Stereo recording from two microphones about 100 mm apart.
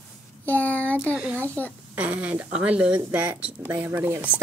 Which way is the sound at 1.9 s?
15° right (ahead or behind).